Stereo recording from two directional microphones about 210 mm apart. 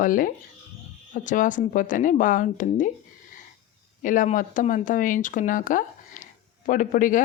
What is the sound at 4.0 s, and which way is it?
Speech, 40° left (ahead or behind).